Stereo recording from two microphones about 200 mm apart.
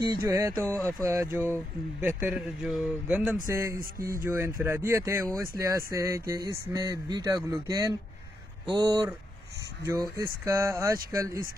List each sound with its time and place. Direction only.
0.0 s speech: 15° right (ahead or behind)
3.4 s speech: 15° right (ahead or behind)